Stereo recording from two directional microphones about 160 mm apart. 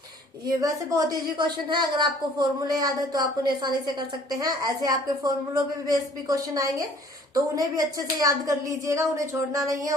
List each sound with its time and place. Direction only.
0.6 s a woman's voice: 20° right (ahead or behind)